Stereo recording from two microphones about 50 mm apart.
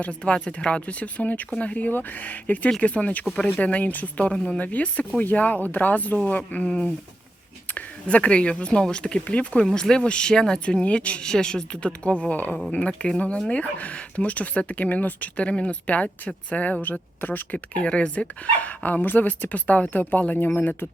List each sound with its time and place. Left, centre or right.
0.0 s speech: left
1.9 s speech: left
4.3 s speech: centre
4.6 s speech: left
8.0 s speech: left
11.3 s speech: centre; by 20.5 s left